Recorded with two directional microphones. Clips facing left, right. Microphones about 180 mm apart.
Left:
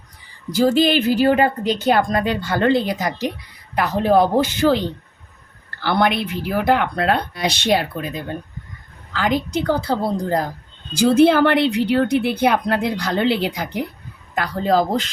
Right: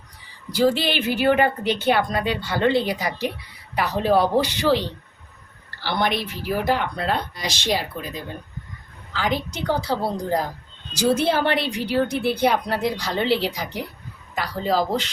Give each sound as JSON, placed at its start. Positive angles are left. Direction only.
{"t": 0.5, "sound": "a woman's voice", "side_deg": 45}
{"t": 5.8, "sound": "a woman's voice", "side_deg": 60}